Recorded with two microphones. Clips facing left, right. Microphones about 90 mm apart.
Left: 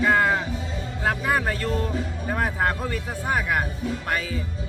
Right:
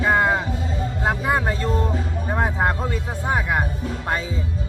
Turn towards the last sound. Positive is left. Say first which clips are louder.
# right 2 dB
turn(degrees=-20)  # may be behind; listen again after turning